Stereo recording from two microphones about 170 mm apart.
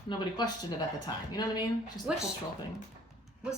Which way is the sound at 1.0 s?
25° left (ahead or behind).